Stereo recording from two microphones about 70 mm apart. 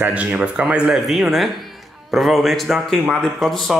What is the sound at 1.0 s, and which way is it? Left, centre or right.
Speech, centre.